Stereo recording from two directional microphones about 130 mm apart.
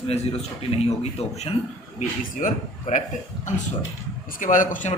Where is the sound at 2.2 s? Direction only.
80° left.